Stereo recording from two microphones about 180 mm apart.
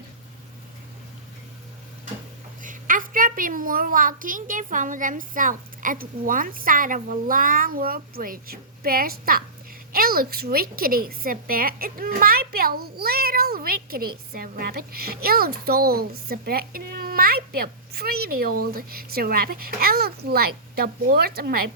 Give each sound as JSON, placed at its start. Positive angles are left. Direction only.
{"t": 2.6, "sound": "a child's voice", "side_deg": -50}